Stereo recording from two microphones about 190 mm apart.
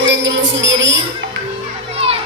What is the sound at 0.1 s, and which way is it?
Music, 70° right (ahead or behind).